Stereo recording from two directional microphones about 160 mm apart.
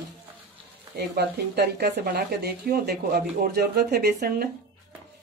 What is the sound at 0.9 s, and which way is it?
Speech, 80° right.